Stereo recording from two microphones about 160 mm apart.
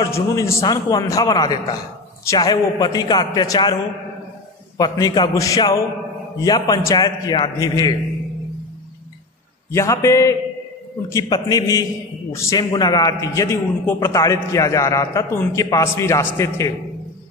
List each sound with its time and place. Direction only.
0.0 s a man's voice: 20° left (ahead or behind)
4.7 s a man's voice: 25° left (ahead or behind)
9.7 s a man's voice: 20° left (ahead or behind)